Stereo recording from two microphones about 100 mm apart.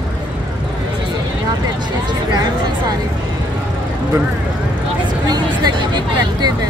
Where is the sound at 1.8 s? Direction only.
45° right (ahead or behind).